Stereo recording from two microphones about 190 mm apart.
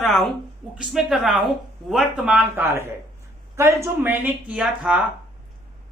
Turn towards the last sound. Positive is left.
turn(degrees=-5)  # may be behind; listen again after turning